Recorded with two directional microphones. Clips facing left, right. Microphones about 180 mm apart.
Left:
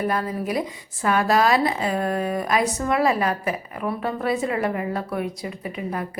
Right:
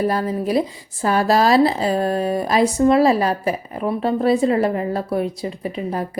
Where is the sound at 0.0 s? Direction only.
30° right (ahead or behind).